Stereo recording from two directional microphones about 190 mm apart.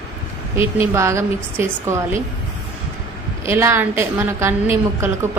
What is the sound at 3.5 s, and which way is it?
A woman's voice, 15° right (ahead or behind).